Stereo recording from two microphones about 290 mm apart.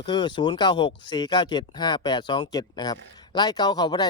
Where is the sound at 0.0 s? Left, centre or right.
Centre.